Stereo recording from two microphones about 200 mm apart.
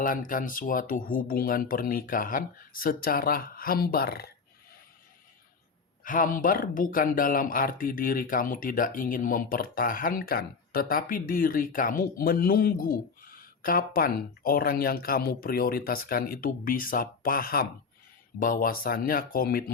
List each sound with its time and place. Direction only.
0.0 s speech: 45° left (ahead or behind)
6.1 s speech: 45° left (ahead or behind)